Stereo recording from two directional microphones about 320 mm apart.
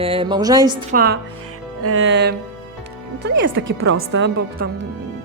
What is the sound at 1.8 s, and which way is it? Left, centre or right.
A woman's voice, right.